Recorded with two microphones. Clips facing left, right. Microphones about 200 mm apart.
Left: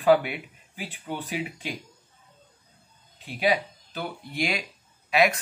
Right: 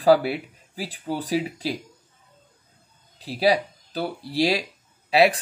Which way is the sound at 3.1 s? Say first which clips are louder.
Right 4 dB; 35° right (ahead or behind).